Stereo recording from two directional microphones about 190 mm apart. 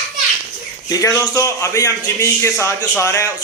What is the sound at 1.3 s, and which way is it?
Speech, 15° left (ahead or behind).